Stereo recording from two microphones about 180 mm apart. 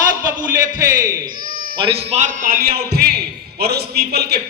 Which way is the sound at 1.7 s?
30° right (ahead or behind).